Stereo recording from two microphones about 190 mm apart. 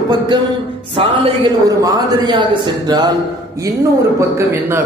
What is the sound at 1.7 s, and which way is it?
A man's voice, 20° right (ahead or behind).